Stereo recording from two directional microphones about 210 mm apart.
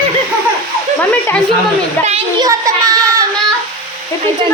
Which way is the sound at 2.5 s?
15° right (ahead or behind).